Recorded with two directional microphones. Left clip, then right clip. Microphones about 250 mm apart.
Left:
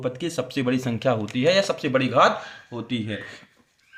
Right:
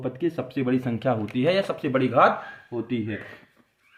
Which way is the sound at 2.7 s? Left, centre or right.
Left.